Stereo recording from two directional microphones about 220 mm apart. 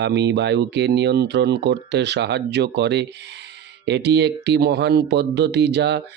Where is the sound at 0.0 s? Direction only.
55° right (ahead or behind).